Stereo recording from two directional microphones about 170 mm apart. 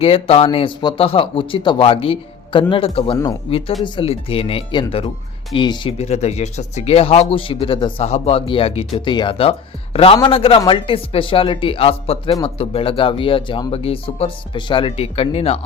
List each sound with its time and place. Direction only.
0.0 s speech: 35° left (ahead or behind)
6.1 s speech: 40° left (ahead or behind)